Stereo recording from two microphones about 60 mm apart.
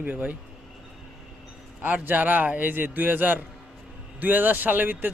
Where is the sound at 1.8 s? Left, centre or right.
Right.